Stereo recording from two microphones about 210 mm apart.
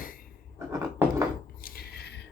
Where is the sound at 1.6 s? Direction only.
50° left (ahead or behind).